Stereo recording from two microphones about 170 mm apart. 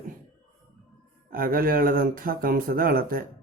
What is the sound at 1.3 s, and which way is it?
Speech, 60° right (ahead or behind).